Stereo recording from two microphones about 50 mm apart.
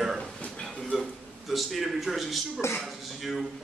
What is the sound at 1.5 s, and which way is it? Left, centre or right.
A man's voice, centre.